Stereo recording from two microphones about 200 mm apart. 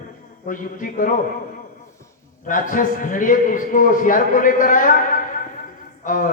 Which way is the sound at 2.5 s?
40° left (ahead or behind).